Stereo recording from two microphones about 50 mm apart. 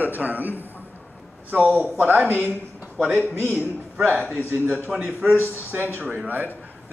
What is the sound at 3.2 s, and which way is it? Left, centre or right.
Speech, left.